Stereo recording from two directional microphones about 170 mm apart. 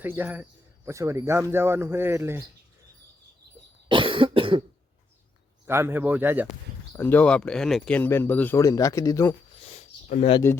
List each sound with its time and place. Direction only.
0.0 s speech: 10° right (ahead or behind)
3.8 s cough: 30° right (ahead or behind)
5.6 s speech: 15° right (ahead or behind)
6.9 s speech: 10° left (ahead or behind)
9.6 s a sound: 40° left (ahead or behind)